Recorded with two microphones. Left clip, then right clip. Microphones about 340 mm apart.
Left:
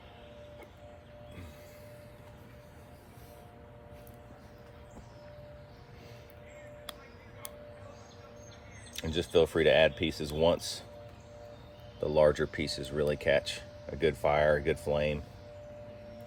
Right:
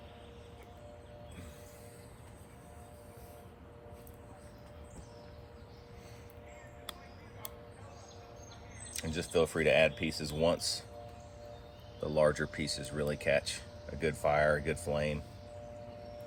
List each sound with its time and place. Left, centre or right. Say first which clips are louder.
8.9 s speech: left 5 dB; left
12.1 s speech: left 4 dB; left